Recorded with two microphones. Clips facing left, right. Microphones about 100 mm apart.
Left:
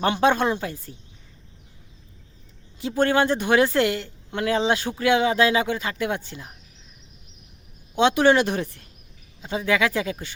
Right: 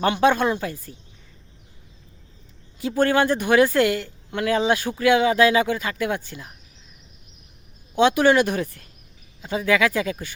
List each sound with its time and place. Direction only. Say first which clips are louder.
0.0 s a woman's voice: right 1 dB; 30° left (ahead or behind)
2.7 s a woman's voice: right 1 dB; 25° left (ahead or behind)
7.9 s a woman's voice: right 1 dB; 25° left (ahead or behind)